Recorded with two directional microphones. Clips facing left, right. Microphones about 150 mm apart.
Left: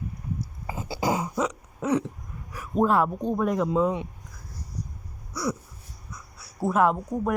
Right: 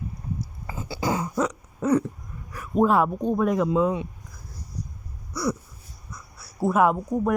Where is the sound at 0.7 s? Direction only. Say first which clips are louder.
Even; 25° left (ahead or behind).